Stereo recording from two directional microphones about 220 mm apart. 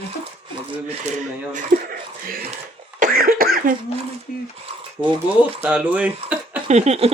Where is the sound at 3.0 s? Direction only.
40° right (ahead or behind).